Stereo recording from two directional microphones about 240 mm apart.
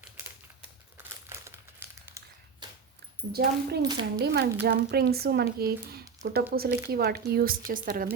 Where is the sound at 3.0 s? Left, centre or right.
Right.